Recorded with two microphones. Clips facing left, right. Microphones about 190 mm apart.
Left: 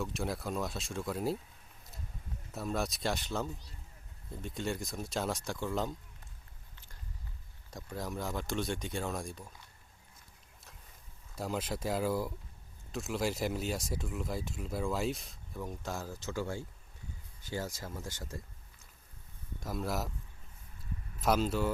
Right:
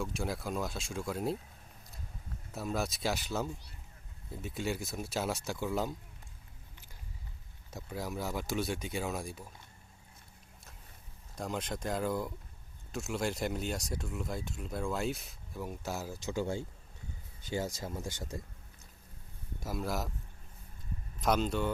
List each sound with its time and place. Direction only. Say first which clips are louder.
0.0 s speech: even; centre (ahead or behind)
2.5 s speech: even; centre (ahead or behind)
7.7 s speech: right 1 dB; 5° right (ahead or behind)
11.3 s speech: left 1 dB; 5° left (ahead or behind); by 18.3 s 15° right (ahead or behind)
19.6 s speech: even; centre (ahead or behind)
21.2 s speech: even; 5° left (ahead or behind)